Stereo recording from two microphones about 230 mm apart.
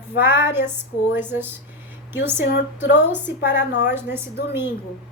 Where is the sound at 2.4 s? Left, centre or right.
Left.